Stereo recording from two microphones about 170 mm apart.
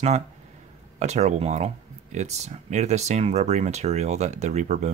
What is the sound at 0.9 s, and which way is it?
Speech, 40° right (ahead or behind).